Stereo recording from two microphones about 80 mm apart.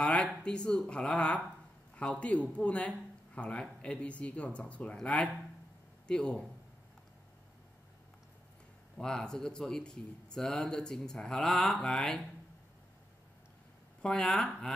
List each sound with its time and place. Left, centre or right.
0.0 s speech: centre
8.9 s speech: centre
14.0 s speech: centre